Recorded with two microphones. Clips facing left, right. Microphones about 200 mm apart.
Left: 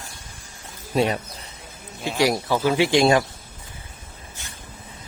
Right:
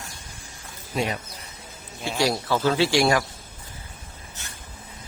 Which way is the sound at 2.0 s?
15° left (ahead or behind).